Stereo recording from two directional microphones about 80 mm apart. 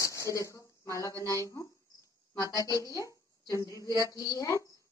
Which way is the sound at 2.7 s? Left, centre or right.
Left.